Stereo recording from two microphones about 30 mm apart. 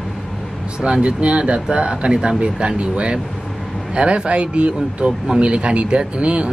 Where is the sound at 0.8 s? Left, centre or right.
Right.